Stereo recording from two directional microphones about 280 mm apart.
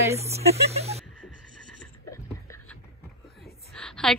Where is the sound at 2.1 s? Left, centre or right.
Centre.